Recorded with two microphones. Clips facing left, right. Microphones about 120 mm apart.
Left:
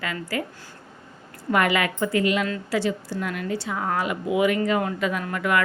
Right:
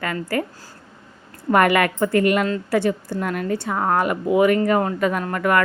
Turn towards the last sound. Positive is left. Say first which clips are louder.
# right 4 dB
turn(degrees=-45)  # may be behind; listen again after turning